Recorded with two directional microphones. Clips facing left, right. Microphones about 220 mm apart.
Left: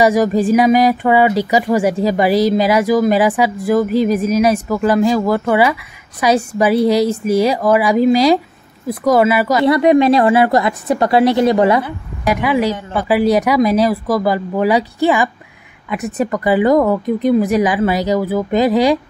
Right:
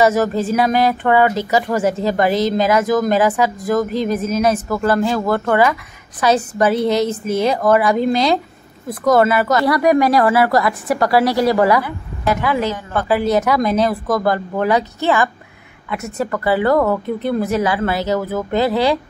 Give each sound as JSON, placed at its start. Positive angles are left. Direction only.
{"t": 0.0, "sound": "speech", "side_deg": 15}
{"t": 9.7, "sound": "a woman's voice", "side_deg": 25}